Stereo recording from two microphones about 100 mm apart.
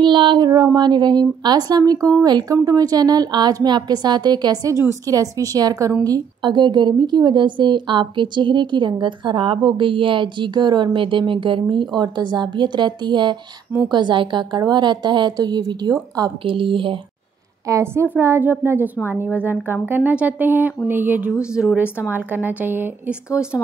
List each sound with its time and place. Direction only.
0.0 s a woman's voice: 55° right (ahead or behind)
16.4 s a woman's voice: 60° right (ahead or behind)
17.6 s a woman's voice: 30° right (ahead or behind)
18.0 s a woman's voice: 20° right (ahead or behind)